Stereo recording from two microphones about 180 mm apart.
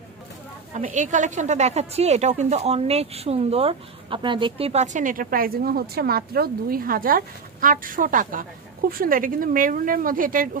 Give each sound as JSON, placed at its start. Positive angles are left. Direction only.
{"t": 0.7, "sound": "a woman's voice", "side_deg": -45}